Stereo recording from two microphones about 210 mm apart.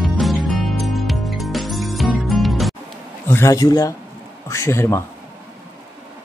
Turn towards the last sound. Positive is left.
turn(degrees=10)  # may be behind; listen again after turning